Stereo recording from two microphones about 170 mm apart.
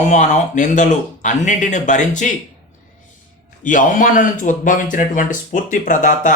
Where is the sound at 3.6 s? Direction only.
50° left (ahead or behind).